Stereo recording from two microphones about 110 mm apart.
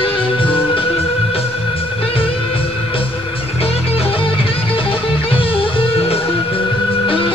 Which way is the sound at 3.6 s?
60° left (ahead or behind).